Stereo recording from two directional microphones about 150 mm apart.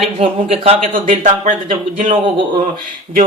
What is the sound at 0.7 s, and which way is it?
Speech, 55° right (ahead or behind).